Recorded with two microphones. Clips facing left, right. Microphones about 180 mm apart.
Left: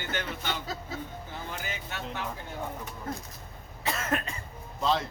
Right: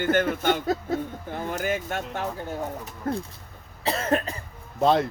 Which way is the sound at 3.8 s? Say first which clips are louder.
Right 6 dB; 35° right (ahead or behind).